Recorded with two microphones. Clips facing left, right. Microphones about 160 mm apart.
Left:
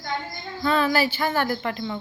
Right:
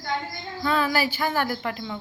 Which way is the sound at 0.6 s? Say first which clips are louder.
Left 2 dB; 5° right (ahead or behind).